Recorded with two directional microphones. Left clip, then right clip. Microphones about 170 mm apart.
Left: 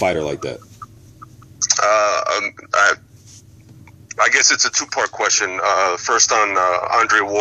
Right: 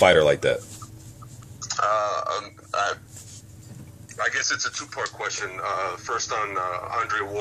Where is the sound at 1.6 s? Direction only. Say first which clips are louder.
Left 8 dB; 40° left (ahead or behind).